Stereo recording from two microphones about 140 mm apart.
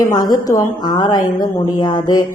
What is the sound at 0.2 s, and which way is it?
A woman's voice, 25° left (ahead or behind).